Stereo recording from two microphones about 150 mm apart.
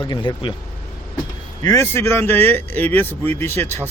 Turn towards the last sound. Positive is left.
turn(degrees=15)  # may be behind; listen again after turning